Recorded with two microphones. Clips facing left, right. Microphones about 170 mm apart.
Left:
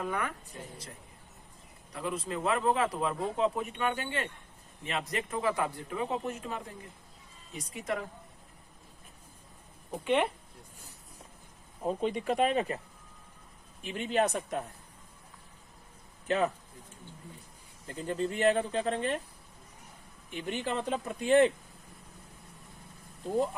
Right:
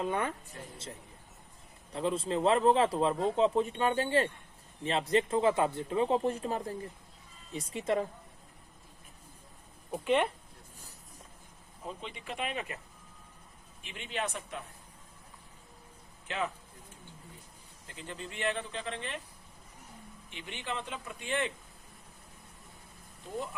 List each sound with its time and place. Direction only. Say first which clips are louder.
0.0 s speech: right 2 dB; 25° right (ahead or behind)
1.9 s speech: right 4 dB; 30° right (ahead or behind)
10.0 s speech: even; centre (ahead or behind)
11.8 s speech: left 12 dB; 45° left (ahead or behind)
13.8 s speech: left 8 dB; 45° left (ahead or behind)
16.2 s speech: left 7 dB; 40° left (ahead or behind)
17.8 s speech: left 11 dB; 40° left (ahead or behind)
20.3 s speech: left 6 dB; 45° left (ahead or behind)